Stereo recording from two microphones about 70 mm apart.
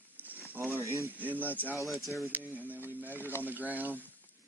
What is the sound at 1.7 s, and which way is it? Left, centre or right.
Speech, centre.